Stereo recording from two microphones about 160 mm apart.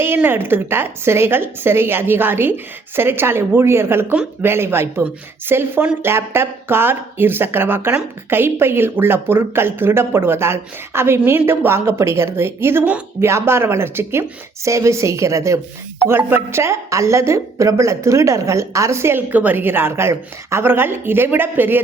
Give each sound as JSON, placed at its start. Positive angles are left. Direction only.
{"t": 0.0, "sound": "a woman's voice", "side_deg": -15}